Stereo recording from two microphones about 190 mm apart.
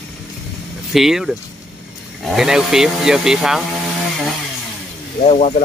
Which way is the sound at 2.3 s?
Centre (ahead or behind).